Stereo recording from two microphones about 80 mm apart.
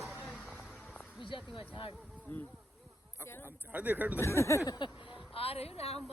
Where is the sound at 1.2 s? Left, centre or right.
Left.